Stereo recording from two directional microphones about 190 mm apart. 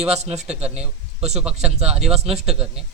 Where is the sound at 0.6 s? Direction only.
5° right (ahead or behind).